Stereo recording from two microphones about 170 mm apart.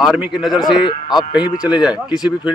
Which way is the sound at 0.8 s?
25° left (ahead or behind).